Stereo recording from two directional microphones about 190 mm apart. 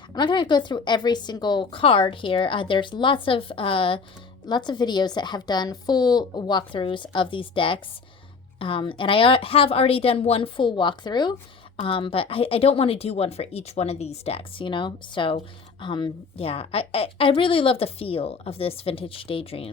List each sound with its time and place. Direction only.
0.1 s a woman's voice: 25° left (ahead or behind)